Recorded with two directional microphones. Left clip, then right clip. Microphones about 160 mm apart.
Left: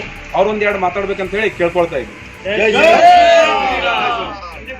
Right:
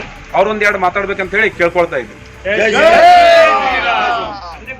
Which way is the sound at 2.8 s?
5° right (ahead or behind).